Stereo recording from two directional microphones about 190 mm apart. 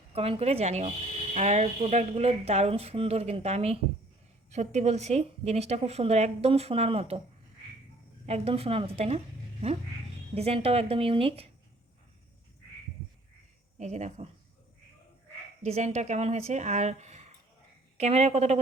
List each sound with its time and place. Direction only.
0.1 s speech: 30° right (ahead or behind)
8.3 s a woman's voice: 30° right (ahead or behind)
13.7 s speech: 35° right (ahead or behind)
15.6 s speech: 35° right (ahead or behind)